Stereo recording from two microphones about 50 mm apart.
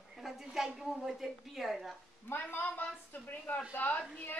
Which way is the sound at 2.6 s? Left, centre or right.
Left.